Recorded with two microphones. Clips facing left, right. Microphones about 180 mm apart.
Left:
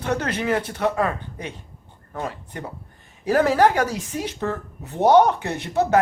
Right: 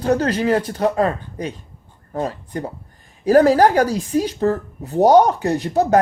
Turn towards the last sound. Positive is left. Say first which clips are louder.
# right 5 dB
turn(degrees=-35)  # may be behind; listen again after turning